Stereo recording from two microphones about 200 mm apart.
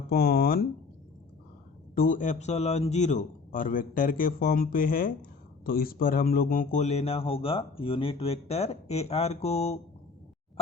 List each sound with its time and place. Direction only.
0.1 s a man's voice: 50° left (ahead or behind)
2.0 s a man's voice: 40° left (ahead or behind)